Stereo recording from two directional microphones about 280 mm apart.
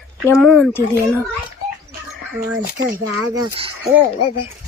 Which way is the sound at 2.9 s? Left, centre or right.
Centre.